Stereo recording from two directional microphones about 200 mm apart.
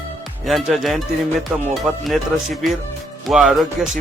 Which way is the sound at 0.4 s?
Centre (ahead or behind).